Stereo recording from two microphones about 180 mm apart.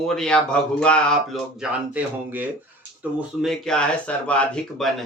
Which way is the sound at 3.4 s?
Centre (ahead or behind).